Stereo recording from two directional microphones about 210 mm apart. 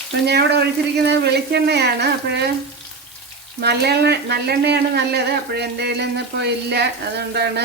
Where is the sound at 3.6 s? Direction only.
50° right (ahead or behind).